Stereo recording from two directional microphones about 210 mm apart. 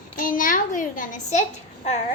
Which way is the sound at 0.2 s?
40° left (ahead or behind).